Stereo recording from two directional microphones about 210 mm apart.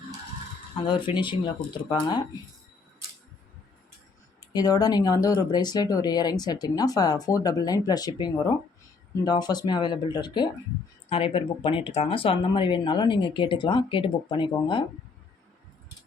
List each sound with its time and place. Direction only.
0.9 s speech: 20° left (ahead or behind)
4.5 s speech: 20° left (ahead or behind)